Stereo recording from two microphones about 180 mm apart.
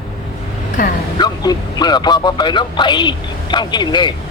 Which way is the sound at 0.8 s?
50° left (ahead or behind).